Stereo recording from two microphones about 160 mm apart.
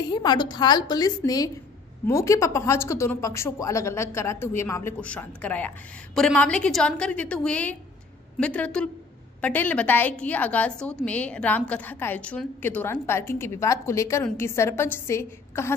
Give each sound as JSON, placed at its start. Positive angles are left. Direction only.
{"t": 0.1, "sound": "a woman's voice", "side_deg": 25}